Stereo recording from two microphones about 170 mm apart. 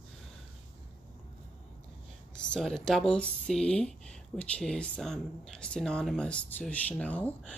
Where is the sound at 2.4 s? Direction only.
5° left (ahead or behind).